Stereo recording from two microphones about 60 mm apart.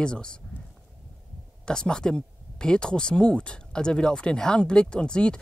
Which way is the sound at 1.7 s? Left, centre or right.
Centre.